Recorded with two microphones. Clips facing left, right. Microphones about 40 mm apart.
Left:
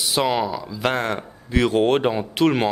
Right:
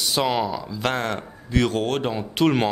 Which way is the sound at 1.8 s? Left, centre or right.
Left.